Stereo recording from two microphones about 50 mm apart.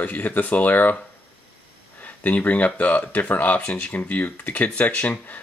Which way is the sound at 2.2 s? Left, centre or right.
Left.